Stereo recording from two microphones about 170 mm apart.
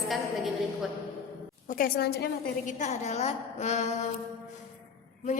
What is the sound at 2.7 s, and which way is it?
A woman's voice, 45° left (ahead or behind).